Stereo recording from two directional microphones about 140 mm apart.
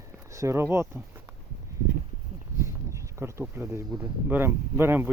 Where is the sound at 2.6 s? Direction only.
20° right (ahead or behind).